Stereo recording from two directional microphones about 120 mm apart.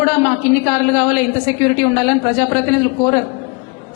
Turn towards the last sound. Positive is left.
turn(degrees=20)  # may be behind; listen again after turning